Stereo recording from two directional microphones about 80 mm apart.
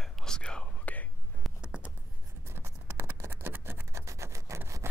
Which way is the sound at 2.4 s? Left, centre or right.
Right.